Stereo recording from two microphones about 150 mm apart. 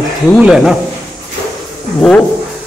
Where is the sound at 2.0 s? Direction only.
5° left (ahead or behind).